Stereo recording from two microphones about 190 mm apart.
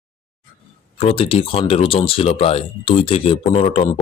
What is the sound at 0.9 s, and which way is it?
Speech, 30° left (ahead or behind).